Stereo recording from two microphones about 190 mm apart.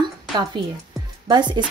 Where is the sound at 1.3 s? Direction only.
25° right (ahead or behind).